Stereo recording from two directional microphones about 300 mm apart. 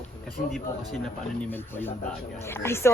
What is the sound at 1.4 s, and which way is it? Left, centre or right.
Speech, centre.